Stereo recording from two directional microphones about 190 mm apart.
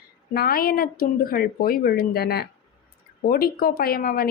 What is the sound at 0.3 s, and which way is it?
Speech, 50° left (ahead or behind).